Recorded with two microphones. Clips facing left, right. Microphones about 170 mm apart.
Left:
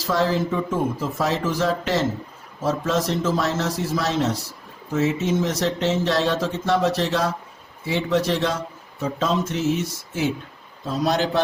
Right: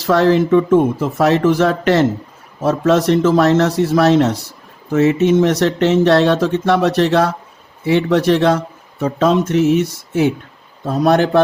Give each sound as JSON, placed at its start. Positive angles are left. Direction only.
{"t": 0.1, "sound": "speech", "side_deg": -70}